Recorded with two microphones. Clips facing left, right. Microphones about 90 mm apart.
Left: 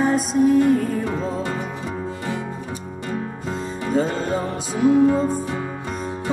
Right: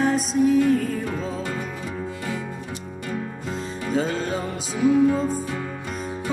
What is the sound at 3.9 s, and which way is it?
Music, centre (ahead or behind).